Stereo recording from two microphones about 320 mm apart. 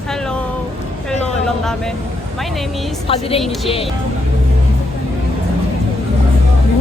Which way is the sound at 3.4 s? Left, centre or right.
Centre.